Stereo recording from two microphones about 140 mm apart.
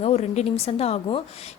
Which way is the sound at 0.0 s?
50° left (ahead or behind).